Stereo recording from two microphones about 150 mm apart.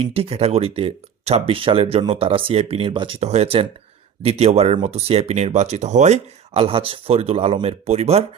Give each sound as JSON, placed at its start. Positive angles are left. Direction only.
{"t": 0.0, "sound": "speech", "side_deg": -40}
{"t": 3.2, "sound": "speech", "side_deg": -45}